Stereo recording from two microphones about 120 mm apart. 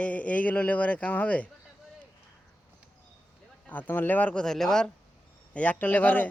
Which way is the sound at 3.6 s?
15° left (ahead or behind).